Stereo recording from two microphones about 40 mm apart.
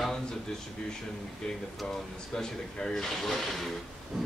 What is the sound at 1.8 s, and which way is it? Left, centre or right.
Speech, centre.